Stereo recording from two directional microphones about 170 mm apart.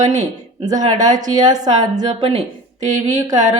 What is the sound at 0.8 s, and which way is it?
Music, 45° right (ahead or behind).